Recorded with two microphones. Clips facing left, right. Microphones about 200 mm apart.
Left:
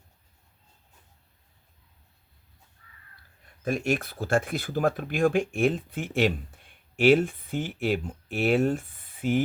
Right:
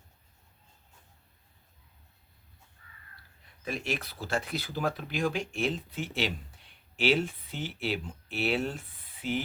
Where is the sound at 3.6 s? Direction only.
50° left (ahead or behind).